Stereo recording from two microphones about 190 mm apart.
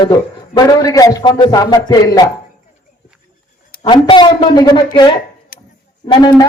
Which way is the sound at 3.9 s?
25° left (ahead or behind).